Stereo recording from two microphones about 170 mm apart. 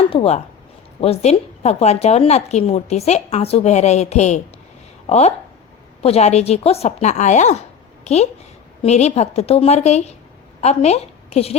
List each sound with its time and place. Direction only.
0.1 s a woman's voice: 35° left (ahead or behind)